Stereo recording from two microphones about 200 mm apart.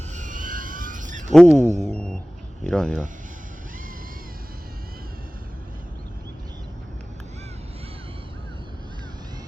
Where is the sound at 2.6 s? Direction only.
5° left (ahead or behind).